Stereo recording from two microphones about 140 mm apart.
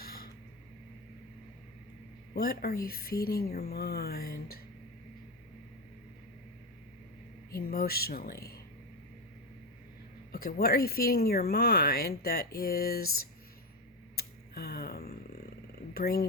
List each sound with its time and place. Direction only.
0.0 s a sound: 90° left
2.3 s speech: 90° left
7.5 s speech: 90° left
10.3 s speech: 90° left
14.2 s a sound: 90° left
16.0 s speech: 90° left